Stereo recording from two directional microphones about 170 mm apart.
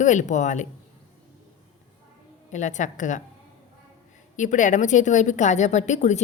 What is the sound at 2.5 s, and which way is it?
Speech, 45° left (ahead or behind).